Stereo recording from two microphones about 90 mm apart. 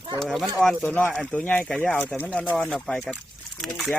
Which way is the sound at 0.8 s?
20° left (ahead or behind).